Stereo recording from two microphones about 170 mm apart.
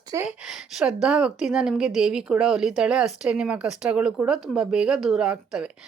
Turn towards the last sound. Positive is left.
turn(degrees=-5)  # may be behind; listen again after turning